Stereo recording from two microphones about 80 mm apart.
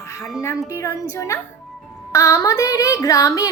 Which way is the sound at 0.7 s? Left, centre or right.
Left.